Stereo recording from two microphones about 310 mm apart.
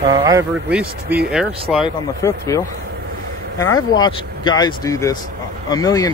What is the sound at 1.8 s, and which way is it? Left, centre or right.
Speech, centre.